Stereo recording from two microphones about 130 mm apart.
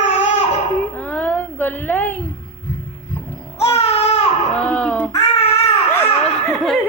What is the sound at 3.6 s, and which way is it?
Music, 50° left (ahead or behind).